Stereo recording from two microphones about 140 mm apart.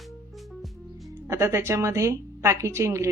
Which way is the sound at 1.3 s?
20° right (ahead or behind).